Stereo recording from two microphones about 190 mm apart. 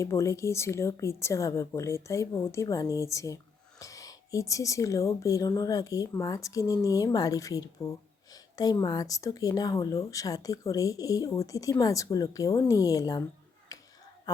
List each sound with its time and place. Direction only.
0.0 s speech: 15° left (ahead or behind)
13.7 s finger snapping: 20° left (ahead or behind)
14.3 s a sound: 20° left (ahead or behind)